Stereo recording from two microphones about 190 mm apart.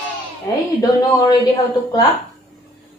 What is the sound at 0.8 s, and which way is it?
Speech, 20° left (ahead or behind).